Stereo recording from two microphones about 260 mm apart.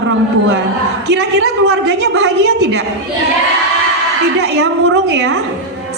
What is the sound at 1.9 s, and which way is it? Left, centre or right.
Speech, right.